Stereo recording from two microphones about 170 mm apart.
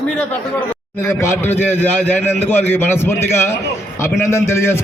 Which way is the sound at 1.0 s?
15° left (ahead or behind).